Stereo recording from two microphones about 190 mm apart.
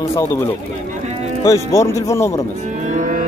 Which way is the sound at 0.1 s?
15° left (ahead or behind).